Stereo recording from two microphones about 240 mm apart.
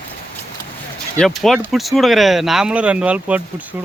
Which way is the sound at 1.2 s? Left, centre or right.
Centre.